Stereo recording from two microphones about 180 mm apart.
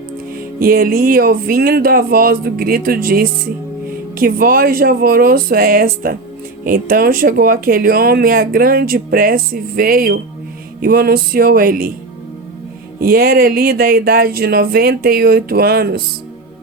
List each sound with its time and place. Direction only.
0.6 s speech: 55° right (ahead or behind)
13.0 s speech: 55° right (ahead or behind)